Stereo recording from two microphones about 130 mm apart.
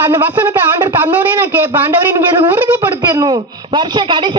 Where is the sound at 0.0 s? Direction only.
15° right (ahead or behind).